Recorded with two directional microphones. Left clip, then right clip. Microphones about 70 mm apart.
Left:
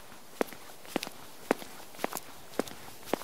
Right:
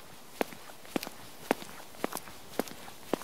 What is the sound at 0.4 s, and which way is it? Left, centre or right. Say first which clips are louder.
Walk: left 1 dB; centre.